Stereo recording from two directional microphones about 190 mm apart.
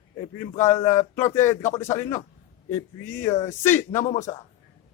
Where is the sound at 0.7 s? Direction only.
15° left (ahead or behind).